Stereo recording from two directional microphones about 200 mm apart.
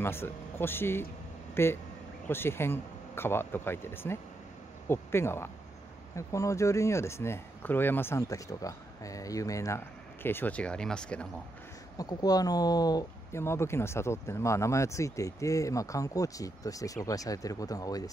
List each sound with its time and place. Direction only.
0.0 s speech: 10° left (ahead or behind)
12.0 s speech: 20° left (ahead or behind)